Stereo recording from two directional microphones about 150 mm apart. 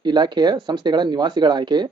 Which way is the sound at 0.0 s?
30° right (ahead or behind).